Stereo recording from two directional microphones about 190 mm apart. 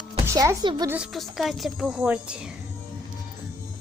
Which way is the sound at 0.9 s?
5° right (ahead or behind).